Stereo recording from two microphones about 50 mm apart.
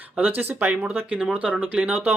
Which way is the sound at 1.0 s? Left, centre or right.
Right.